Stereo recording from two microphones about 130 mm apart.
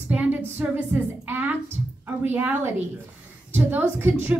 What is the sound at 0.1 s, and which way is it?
A woman's voice, 10° right (ahead or behind).